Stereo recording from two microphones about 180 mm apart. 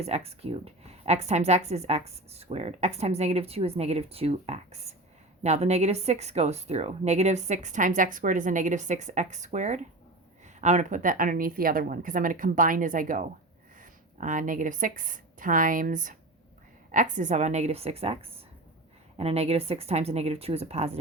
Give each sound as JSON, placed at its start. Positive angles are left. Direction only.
{"t": 0.0, "sound": "a woman's voice", "side_deg": -35}